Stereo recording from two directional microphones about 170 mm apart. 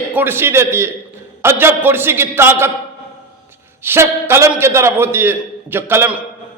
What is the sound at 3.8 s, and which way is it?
A man's voice, 15° right (ahead or behind).